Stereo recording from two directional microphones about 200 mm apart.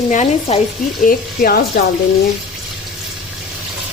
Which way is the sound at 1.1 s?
45° left (ahead or behind).